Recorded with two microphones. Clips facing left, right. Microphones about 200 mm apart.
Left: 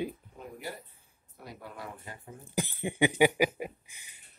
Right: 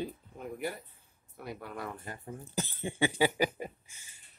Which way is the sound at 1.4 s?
55° right (ahead or behind).